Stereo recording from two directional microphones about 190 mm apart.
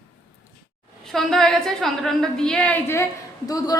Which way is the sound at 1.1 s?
Centre (ahead or behind).